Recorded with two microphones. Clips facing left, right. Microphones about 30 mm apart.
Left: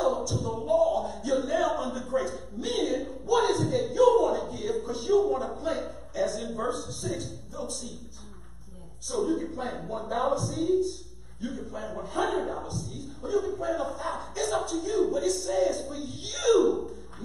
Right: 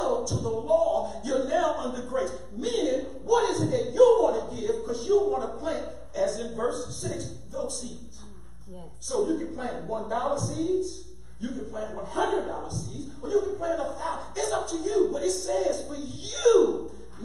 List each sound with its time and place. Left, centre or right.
0.0 s a sound: centre
7.5 s a man's voice: centre
9.1 s a man's voice: centre